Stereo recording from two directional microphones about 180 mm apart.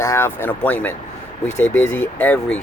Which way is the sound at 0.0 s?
15° left (ahead or behind).